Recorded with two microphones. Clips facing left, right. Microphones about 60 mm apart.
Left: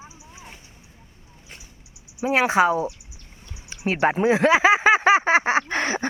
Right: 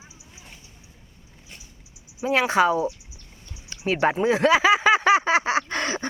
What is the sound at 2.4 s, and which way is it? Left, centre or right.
Speech, left.